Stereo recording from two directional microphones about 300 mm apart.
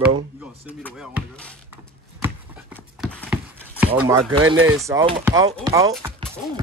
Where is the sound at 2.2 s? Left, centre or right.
Centre.